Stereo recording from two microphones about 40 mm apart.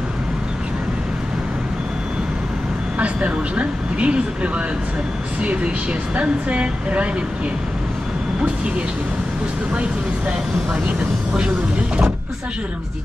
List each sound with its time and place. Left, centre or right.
3.0 s speech: right